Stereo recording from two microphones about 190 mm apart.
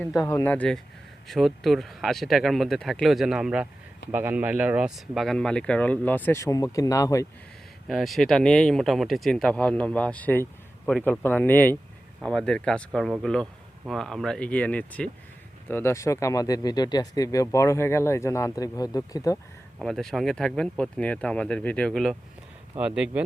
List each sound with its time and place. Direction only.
0.0 s speech: centre (ahead or behind)
0.3 s speech: 10° left (ahead or behind)
7.9 s speech: centre (ahead or behind); by 19.4 s 20° left (ahead or behind)
19.8 s speech: centre (ahead or behind)